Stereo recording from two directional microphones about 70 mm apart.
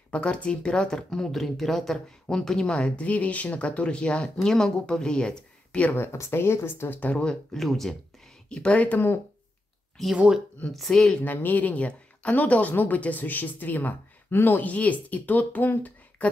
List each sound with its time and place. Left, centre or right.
0.1 s speech: centre
5.9 s speech: left
7.0 s speech: centre
7.5 s speech: centre
8.5 s speech: centre
10.1 s speech: centre
10.7 s speech: centre
11.2 s speech: left